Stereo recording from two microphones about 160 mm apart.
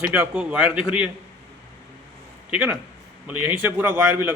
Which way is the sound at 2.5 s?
10° right (ahead or behind).